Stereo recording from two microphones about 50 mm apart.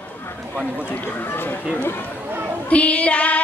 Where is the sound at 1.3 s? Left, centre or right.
Left.